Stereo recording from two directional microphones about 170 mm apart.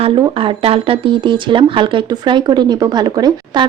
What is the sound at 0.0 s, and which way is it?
Speech, 35° right (ahead or behind).